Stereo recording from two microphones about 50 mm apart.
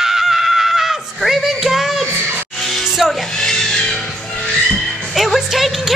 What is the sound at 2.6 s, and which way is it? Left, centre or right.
Music, centre.